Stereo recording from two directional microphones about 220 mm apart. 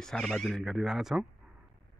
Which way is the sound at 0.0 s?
Centre (ahead or behind).